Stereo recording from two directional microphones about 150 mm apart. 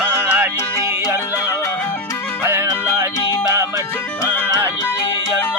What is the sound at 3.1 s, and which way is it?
Music, 25° left (ahead or behind).